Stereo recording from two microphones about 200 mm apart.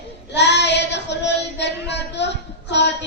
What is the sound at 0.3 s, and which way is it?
Child singing, 60° left (ahead or behind).